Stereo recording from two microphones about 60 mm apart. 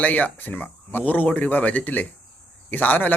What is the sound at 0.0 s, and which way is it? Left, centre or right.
A man's voice, left.